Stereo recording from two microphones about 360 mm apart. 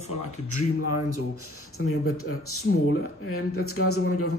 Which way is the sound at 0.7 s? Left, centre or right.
Left.